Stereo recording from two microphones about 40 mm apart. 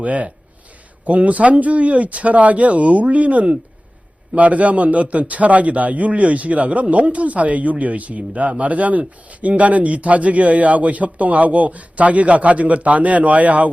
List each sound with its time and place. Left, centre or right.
0.0 s a man's voice: right